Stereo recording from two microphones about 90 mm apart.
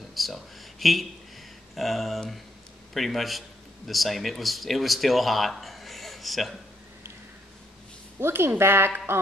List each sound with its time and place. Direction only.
0.1 s a sound: centre (ahead or behind)
1.8 s a man's voice: centre (ahead or behind)
8.2 s speech: 25° right (ahead or behind)